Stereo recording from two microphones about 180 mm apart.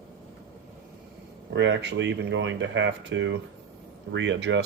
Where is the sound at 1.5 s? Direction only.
90° right.